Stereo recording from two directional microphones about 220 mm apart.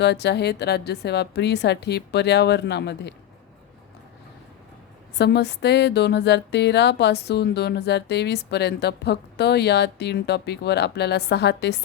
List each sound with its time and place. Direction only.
0.0 s speech: 50° left (ahead or behind)
5.1 s speech: 50° left (ahead or behind)